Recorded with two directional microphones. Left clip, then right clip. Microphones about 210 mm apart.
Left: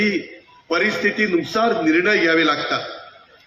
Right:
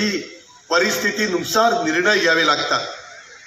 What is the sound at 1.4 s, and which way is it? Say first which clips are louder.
A man's voice: right 2 dB; 35° left (ahead or behind).